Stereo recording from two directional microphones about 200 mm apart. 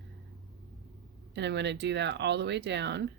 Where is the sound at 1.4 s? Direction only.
60° right (ahead or behind).